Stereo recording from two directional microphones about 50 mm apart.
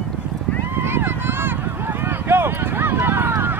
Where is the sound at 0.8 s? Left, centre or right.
Right.